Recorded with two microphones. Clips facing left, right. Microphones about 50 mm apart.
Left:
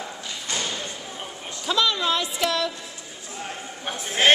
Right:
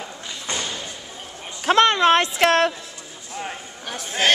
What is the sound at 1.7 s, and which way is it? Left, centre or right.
Speech, right.